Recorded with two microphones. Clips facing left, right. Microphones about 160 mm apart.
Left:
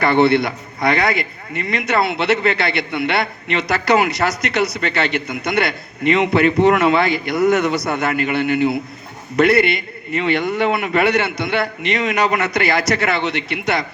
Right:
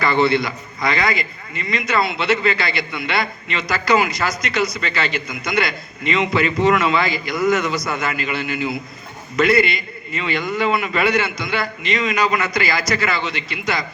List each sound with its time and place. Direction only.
0.0 s a man's voice: 65° left (ahead or behind)